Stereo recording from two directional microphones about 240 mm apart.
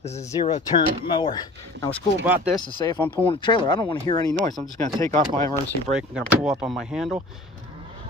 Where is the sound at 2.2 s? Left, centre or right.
Centre.